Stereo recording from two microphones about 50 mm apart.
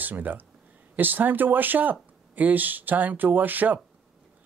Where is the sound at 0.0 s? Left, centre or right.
Right.